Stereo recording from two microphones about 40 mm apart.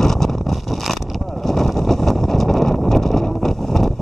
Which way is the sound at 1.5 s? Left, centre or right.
Centre.